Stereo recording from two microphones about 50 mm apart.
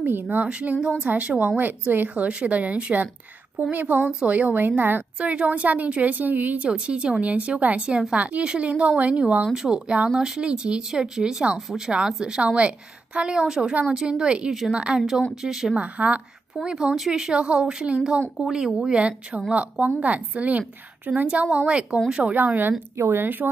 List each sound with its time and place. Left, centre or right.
0.0 s speech: right
0.5 s a woman's voice: right
1.6 s speech: right
2.2 s a woman's voice: right
5.2 s a woman's voice: right
6.7 s a woman's voice: centre
9.5 s a woman's voice: centre
15.0 s a woman's voice: centre
15.8 s a woman's voice: right
16.6 s a woman's voice: centre
22.3 s speech: right
22.9 s a woman's voice: right
23.2 s speech: right